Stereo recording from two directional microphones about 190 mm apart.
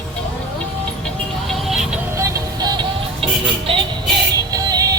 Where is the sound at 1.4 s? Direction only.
Centre (ahead or behind).